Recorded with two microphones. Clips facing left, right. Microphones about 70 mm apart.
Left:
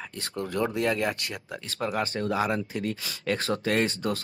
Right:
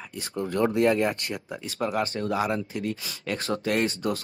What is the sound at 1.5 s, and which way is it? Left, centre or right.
Speech, centre.